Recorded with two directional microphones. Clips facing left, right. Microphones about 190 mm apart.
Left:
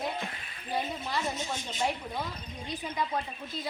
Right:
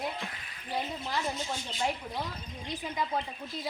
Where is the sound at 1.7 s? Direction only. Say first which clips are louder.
Left 1 dB; 20° left (ahead or behind).